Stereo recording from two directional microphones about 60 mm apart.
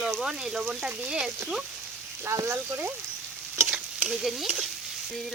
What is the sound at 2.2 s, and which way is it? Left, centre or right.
Speech, right.